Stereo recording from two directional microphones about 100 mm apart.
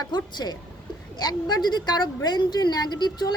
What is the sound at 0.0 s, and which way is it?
A woman's voice, 45° left (ahead or behind).